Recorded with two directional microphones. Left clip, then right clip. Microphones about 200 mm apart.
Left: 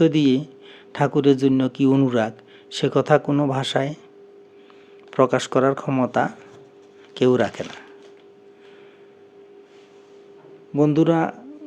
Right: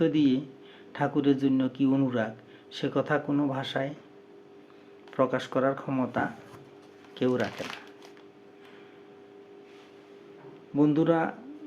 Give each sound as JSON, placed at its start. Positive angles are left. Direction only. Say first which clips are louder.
{"t": 0.0, "sound": "a man's voice", "louder": "left 7 dB", "side_deg": 50}
{"t": 5.1, "sound": "a man's voice", "louder": "left 8 dB", "side_deg": 50}
{"t": 10.8, "sound": "speech", "louder": "left 6 dB", "side_deg": 40}